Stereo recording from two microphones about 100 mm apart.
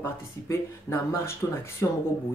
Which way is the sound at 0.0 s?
25° left (ahead or behind).